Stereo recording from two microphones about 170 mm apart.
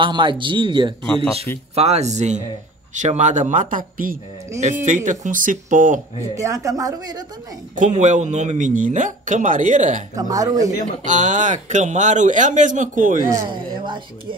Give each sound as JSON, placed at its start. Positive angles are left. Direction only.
{"t": 0.0, "sound": "a woman's voice", "side_deg": -30}
{"t": 1.0, "sound": "speech", "side_deg": 5}
{"t": 1.8, "sound": "speech", "side_deg": -40}
{"t": 6.3, "sound": "a woman's voice", "side_deg": -20}
{"t": 8.0, "sound": "speech", "side_deg": -45}
{"t": 10.1, "sound": "a woman's voice", "side_deg": -20}
{"t": 10.7, "sound": "speech", "side_deg": -45}
{"t": 13.5, "sound": "speech", "side_deg": -30}